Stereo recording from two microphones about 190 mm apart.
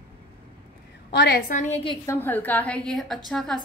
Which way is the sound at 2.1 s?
10° left (ahead or behind).